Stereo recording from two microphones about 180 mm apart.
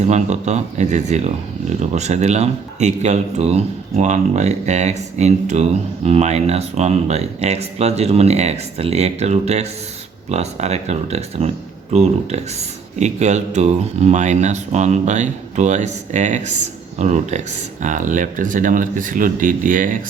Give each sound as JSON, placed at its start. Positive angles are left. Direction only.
{"t": 0.0, "sound": "speech", "side_deg": -40}